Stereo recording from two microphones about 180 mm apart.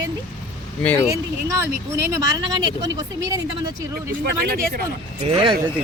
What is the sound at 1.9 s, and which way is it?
Speech, 15° right (ahead or behind).